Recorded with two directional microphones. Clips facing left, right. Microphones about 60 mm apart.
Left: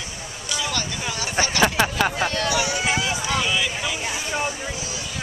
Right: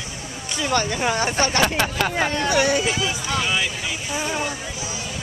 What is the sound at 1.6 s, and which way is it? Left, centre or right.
Speech, centre.